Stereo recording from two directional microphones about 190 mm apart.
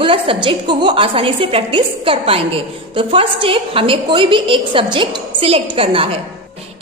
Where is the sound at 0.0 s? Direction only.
25° right (ahead or behind).